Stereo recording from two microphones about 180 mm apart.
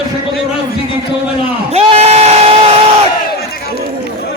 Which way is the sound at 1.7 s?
35° right (ahead or behind).